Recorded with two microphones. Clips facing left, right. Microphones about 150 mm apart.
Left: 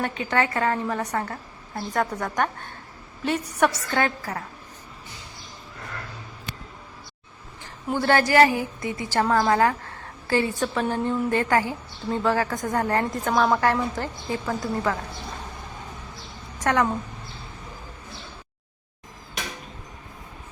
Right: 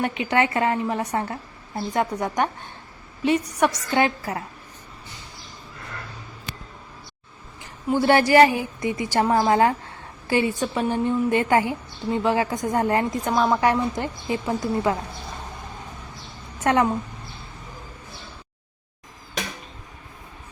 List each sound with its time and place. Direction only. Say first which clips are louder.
0.3 s a woman's voice: right 2 dB; 20° right (ahead or behind)
3.2 s a woman's voice: right 2 dB; centre (ahead or behind)
3.9 s a woman's voice: right 3 dB; 20° right (ahead or behind)
7.9 s a woman's voice: right 3 dB; 15° right (ahead or behind)
13.3 s a woman's voice: even; centre (ahead or behind)
13.6 s a woman's voice: right 2 dB; 15° right (ahead or behind)
16.6 s a woman's voice: right 2 dB; 20° right (ahead or behind)